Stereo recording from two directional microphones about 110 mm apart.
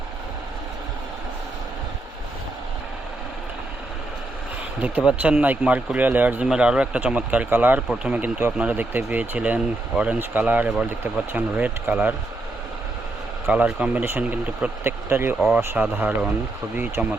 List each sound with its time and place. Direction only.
4.8 s speech: 15° right (ahead or behind)
13.5 s speech: 10° right (ahead or behind)